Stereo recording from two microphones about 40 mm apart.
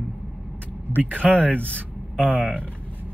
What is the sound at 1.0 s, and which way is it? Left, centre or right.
Speech, right.